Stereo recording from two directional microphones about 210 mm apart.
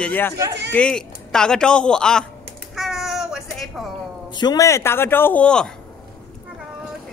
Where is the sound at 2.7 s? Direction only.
Centre (ahead or behind).